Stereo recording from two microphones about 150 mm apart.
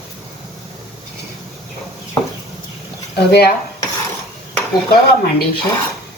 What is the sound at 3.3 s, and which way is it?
Speech, 90° left.